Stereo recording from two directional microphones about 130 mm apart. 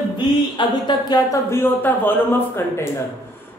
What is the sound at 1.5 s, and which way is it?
A man's voice, 15° left (ahead or behind).